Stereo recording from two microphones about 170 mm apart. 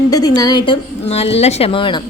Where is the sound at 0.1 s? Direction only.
20° left (ahead or behind).